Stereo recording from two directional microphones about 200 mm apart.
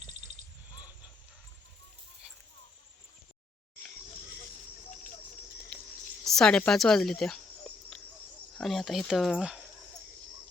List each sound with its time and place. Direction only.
0.0 s a sound: 35° right (ahead or behind)
6.2 s speech: 5° left (ahead or behind)
8.5 s speech: centre (ahead or behind)